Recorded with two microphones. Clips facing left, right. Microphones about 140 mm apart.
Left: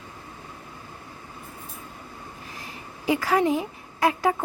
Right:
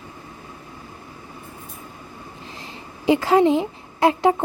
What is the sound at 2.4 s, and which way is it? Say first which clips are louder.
A woman's voice: right 2 dB; 25° right (ahead or behind).